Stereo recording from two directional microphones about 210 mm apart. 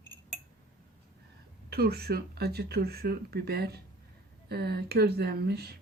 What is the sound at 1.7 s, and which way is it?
Speech, 50° right (ahead or behind).